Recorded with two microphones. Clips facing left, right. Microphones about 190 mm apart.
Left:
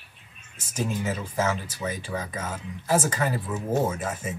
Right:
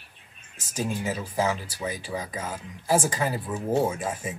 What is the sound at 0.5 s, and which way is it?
Speech, 10° right (ahead or behind).